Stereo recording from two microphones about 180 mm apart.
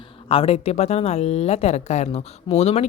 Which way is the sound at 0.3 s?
30° left (ahead or behind).